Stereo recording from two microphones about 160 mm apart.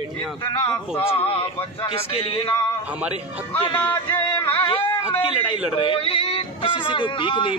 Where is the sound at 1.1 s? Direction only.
35° left (ahead or behind).